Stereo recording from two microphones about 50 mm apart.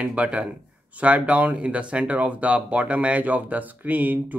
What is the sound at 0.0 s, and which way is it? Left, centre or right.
Speech, right.